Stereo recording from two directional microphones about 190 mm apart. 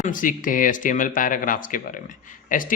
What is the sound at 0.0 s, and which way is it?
Speech, 45° left (ahead or behind).